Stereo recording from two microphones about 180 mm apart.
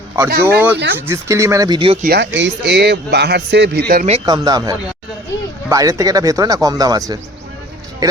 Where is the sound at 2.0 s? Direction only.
60° right (ahead or behind).